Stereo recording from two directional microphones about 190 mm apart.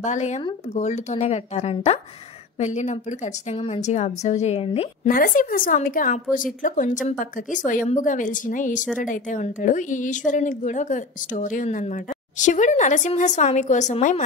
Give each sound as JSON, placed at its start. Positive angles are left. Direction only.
{"t": 0.0, "sound": "a woman's voice", "side_deg": 40}
{"t": 5.0, "sound": "a woman's voice", "side_deg": 45}